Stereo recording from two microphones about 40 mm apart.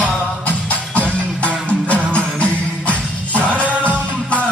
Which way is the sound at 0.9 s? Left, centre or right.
Left.